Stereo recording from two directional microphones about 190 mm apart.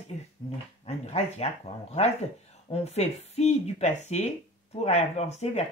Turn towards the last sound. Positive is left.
turn(degrees=35)  # may be behind; listen again after turning